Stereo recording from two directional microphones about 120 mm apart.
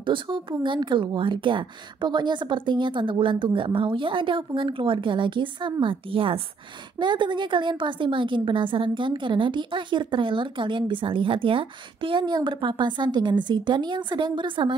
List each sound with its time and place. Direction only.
0.0 s a woman's voice: 40° right (ahead or behind)